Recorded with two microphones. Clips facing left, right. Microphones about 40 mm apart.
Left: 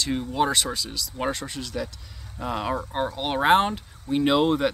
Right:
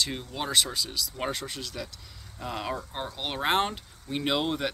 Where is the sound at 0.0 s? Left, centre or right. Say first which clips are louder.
Left 8 dB; centre.